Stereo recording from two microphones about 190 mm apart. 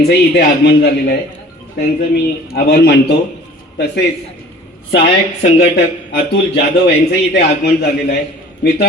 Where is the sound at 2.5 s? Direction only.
55° left (ahead or behind).